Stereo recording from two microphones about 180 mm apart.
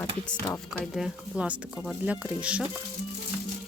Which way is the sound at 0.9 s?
5° right (ahead or behind).